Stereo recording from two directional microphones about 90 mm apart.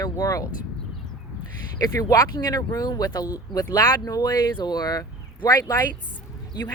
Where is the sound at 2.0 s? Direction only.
40° left (ahead or behind).